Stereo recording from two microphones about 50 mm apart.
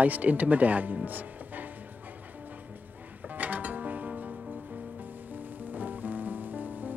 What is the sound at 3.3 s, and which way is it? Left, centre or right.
Music, right.